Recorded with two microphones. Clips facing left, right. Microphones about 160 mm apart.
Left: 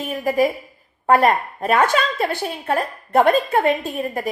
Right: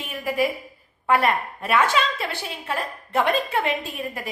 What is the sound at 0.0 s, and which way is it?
A woman's voice, 40° left (ahead or behind).